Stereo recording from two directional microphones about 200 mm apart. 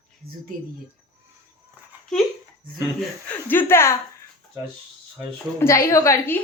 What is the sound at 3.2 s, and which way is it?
Speech, 10° left (ahead or behind).